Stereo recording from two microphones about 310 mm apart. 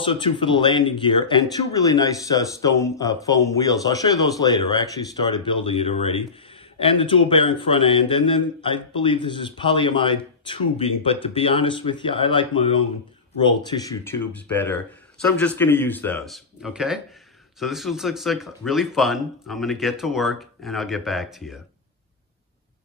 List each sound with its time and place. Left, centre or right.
0.0 s speech: centre